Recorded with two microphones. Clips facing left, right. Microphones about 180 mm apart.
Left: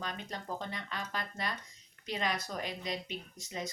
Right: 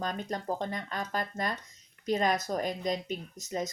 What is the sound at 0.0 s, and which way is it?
A woman's voice, 45° right (ahead or behind).